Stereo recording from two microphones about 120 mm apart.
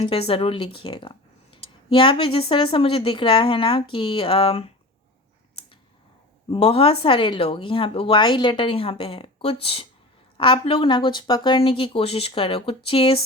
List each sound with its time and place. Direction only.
0.0 s speech: 50° left (ahead or behind)
6.5 s speech: 55° left (ahead or behind)